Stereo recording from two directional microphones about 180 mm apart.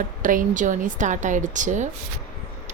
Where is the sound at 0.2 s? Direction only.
45° right (ahead or behind).